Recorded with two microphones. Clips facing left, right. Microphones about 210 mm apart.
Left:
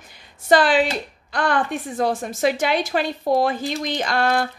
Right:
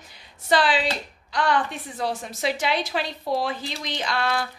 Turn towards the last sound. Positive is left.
turn(degrees=50)  # may be behind; listen again after turning